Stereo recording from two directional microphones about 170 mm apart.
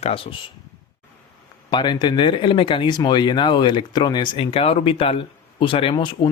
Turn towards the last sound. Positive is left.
turn(degrees=25)  # may be behind; listen again after turning